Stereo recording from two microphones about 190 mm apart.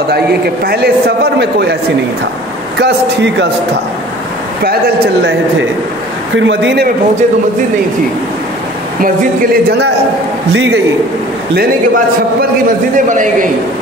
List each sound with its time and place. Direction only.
0.7 s a man's voice: 55° right (ahead or behind)
2.8 s speech: 70° right (ahead or behind)
4.6 s a man's voice: 55° right (ahead or behind)
6.3 s speech: 75° right (ahead or behind)
10.5 s speech: 70° right (ahead or behind)
12.9 s a man's voice: 45° right (ahead or behind)